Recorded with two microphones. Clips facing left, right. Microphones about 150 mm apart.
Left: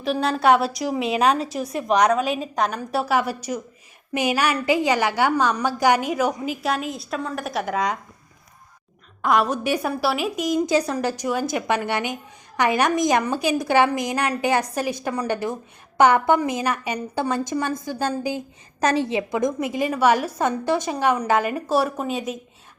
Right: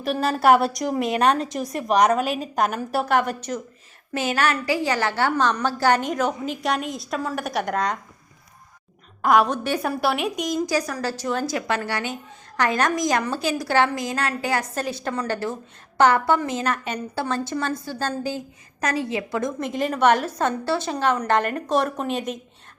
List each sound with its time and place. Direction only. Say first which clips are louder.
0.0 s a woman's voice: even; centre (ahead or behind)
9.2 s a woman's voice: right 2 dB; centre (ahead or behind)
9.6 s a woman's voice: left 1 dB; 10° left (ahead or behind)
10.7 s a woman's voice: left 3 dB; 25° left (ahead or behind)
18.8 s a woman's voice: left 4 dB; 25° left (ahead or behind); by 22.4 s 5° left (ahead or behind)